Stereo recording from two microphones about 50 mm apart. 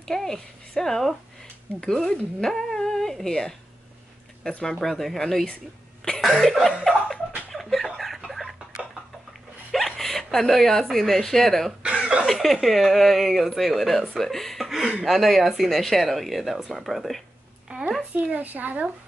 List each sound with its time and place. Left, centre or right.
0.0 s speech: centre
6.2 s chuckle: centre
7.5 s a sound: centre
9.7 s hiccup: centre
10.6 s speech: centre
11.8 s cough: right
12.3 s speech: centre
17.7 s a sound: right
18.1 s speech: right